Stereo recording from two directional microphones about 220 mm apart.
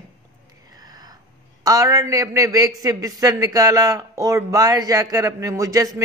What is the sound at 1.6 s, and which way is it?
A man's voice, 15° right (ahead or behind).